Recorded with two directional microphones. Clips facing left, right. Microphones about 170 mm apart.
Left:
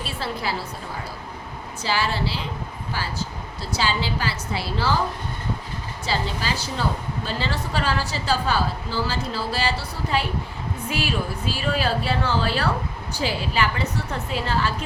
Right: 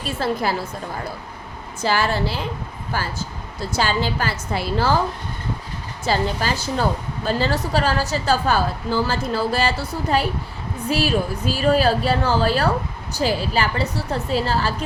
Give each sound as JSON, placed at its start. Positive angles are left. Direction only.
{"t": 0.0, "sound": "a woman's voice", "side_deg": -45}
{"t": 1.8, "sound": "a woman's voice", "side_deg": -50}
{"t": 6.1, "sound": "a woman's voice", "side_deg": -50}